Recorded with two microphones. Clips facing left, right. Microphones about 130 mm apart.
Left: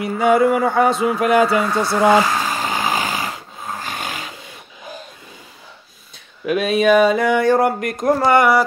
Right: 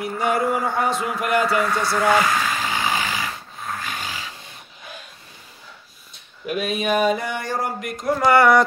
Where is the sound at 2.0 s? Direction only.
30° left (ahead or behind); by 4.2 s 55° left (ahead or behind).